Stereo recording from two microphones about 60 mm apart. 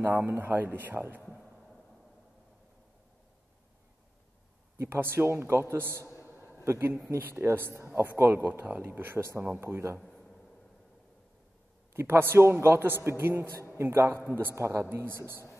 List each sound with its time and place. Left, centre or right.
0.0 s a man's voice: right
4.7 s a man's voice: right
6.2 s a sound: right
6.6 s a man's voice: right
10.0 s a sound: centre
11.9 s a man's voice: right